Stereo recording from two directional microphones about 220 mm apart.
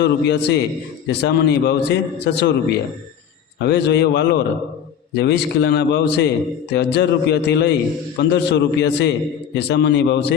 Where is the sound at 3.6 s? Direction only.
50° left (ahead or behind).